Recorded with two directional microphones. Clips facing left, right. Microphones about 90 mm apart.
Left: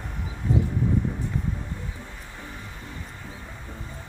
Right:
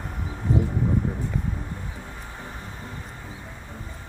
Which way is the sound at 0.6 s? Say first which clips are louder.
Right 1 dB; 35° right (ahead or behind).